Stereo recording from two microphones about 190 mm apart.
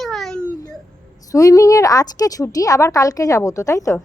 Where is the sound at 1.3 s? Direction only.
15° left (ahead or behind).